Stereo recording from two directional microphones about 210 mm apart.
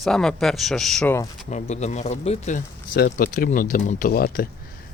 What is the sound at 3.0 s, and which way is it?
Speech, 45° left (ahead or behind).